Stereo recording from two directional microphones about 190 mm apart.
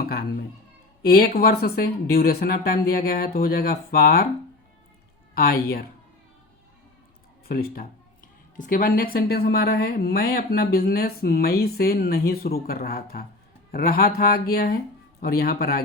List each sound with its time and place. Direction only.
0.0 s children playing: 55° left (ahead or behind)
1.0 s a woman's voice: 55° left (ahead or behind)
5.3 s a woman's voice: 50° left (ahead or behind)
7.4 s a woman's voice: 55° left (ahead or behind)